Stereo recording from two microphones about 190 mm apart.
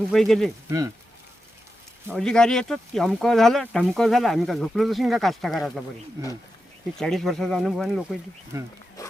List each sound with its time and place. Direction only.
0.1 s speech: centre (ahead or behind)
2.1 s speech: 5° left (ahead or behind)
7.0 s speech: centre (ahead or behind)
9.0 s music: 15° left (ahead or behind)